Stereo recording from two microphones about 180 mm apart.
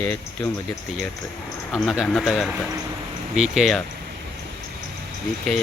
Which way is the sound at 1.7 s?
Centre (ahead or behind).